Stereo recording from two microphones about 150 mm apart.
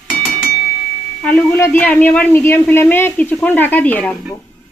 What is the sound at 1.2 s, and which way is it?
A man's voice, 10° left (ahead or behind).